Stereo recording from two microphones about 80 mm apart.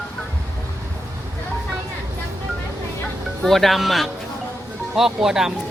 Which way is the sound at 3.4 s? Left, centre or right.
Centre.